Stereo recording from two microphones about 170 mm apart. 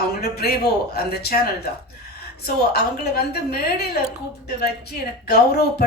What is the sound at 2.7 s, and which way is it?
Speech, 65° left (ahead or behind).